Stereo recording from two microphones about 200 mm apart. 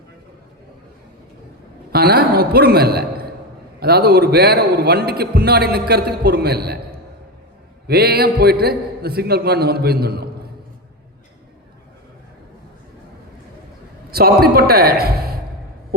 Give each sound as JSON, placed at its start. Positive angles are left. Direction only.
{"t": 1.9, "sound": "a man's voice", "side_deg": -50}
{"t": 7.9, "sound": "a man's voice", "side_deg": -50}
{"t": 14.1, "sound": "a man's voice", "side_deg": -50}